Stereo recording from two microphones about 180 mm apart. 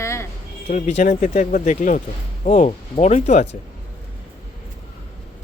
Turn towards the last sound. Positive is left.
turn(degrees=40)  # may be behind; listen again after turning